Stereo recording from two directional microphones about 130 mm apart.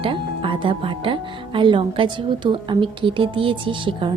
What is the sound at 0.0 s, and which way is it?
Speech, 40° right (ahead or behind).